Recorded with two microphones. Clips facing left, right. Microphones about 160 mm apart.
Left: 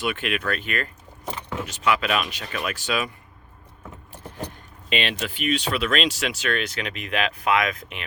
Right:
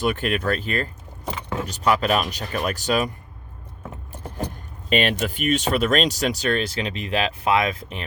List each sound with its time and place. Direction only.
0.0 s speech: 40° right (ahead or behind)
4.9 s speech: 45° right (ahead or behind)